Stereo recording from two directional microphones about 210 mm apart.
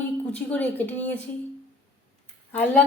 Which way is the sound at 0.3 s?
5° left (ahead or behind).